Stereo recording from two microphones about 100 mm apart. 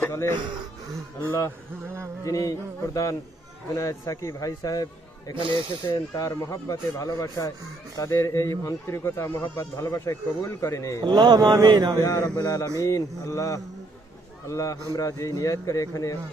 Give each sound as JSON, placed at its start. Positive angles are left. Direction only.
{"t": 0.0, "sound": "speech", "side_deg": 25}
{"t": 1.8, "sound": "a sound", "side_deg": -25}
{"t": 2.2, "sound": "speech", "side_deg": 35}
{"t": 5.3, "sound": "speech", "side_deg": -55}
{"t": 5.9, "sound": "speech", "side_deg": 35}
{"t": 11.0, "sound": "speech", "side_deg": -45}
{"t": 12.0, "sound": "speech", "side_deg": 35}